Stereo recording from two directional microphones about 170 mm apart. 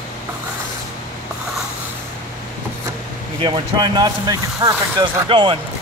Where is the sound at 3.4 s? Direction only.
30° right (ahead or behind).